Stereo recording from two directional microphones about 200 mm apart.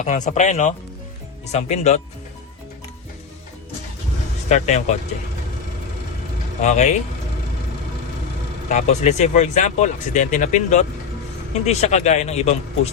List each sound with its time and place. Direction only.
0.0 s speech: 40° left (ahead or behind)
4.4 s speech: 35° left (ahead or behind)
6.6 s speech: 35° left (ahead or behind)
8.7 s speech: 35° left (ahead or behind)